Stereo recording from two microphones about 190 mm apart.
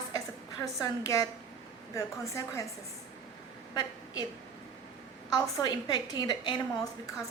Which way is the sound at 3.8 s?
20° left (ahead or behind).